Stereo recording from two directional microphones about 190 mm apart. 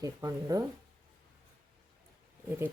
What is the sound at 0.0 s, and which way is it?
Speech, 15° right (ahead or behind).